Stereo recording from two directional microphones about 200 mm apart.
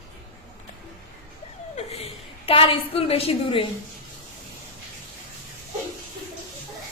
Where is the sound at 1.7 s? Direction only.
30° left (ahead or behind).